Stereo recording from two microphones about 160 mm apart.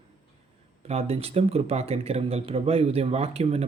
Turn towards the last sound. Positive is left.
turn(degrees=-40)  # may be behind; listen again after turning